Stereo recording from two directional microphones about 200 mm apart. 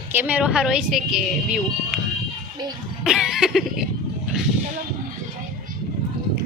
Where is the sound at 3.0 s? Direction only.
Centre (ahead or behind).